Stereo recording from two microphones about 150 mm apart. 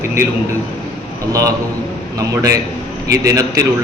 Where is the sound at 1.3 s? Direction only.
20° right (ahead or behind).